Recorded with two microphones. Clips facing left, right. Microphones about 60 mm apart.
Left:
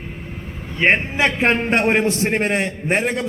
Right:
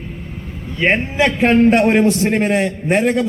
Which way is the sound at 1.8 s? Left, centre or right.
Centre.